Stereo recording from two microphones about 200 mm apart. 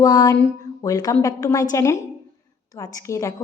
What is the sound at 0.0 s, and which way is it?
A woman's voice, 15° left (ahead or behind).